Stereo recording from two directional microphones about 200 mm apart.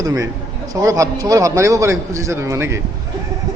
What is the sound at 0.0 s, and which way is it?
A man's voice, 15° right (ahead or behind).